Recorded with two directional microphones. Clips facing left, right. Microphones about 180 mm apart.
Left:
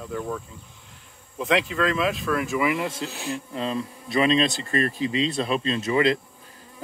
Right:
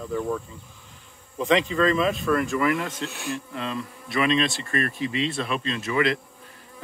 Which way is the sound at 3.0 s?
35° left (ahead or behind).